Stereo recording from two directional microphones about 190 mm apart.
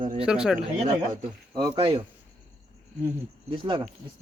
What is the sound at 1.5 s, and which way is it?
Speech, 25° right (ahead or behind).